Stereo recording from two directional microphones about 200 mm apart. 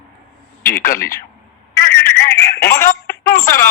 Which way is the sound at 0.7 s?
45° left (ahead or behind).